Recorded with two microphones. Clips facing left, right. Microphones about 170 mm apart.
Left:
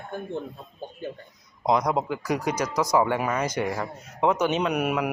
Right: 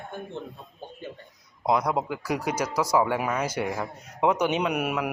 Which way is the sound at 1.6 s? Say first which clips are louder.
Left 1 dB; 5° right (ahead or behind).